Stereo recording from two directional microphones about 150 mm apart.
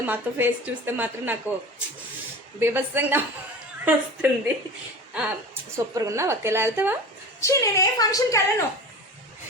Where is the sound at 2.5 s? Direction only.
15° right (ahead or behind).